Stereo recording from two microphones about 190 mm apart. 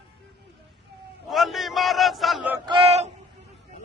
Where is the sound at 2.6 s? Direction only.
30° right (ahead or behind).